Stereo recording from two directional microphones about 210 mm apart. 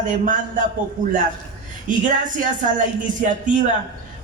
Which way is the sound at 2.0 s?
40° right (ahead or behind).